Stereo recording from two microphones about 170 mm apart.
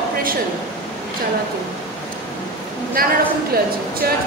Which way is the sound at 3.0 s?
60° right (ahead or behind).